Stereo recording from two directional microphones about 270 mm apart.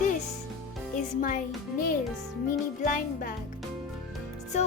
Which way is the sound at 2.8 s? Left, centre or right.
Left.